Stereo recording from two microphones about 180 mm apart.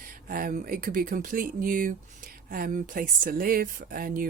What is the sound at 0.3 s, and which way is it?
Speech, 50° right (ahead or behind).